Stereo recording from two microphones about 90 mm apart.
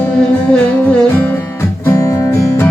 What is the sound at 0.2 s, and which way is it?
Music, 10° left (ahead or behind).